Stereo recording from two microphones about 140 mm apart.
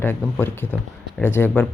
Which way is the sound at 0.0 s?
15° left (ahead or behind).